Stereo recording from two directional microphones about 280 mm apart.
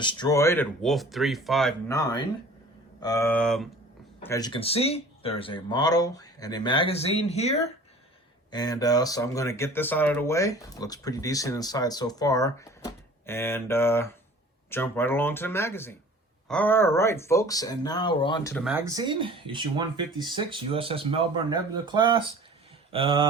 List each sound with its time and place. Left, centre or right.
0.0 s speech: centre
1.9 s speech: centre
18.5 s speech: centre